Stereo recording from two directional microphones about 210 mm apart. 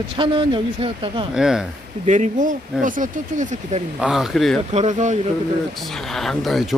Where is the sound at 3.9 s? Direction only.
5° right (ahead or behind).